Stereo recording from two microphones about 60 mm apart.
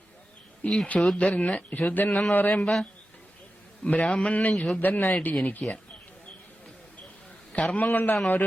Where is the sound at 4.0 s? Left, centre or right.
Centre.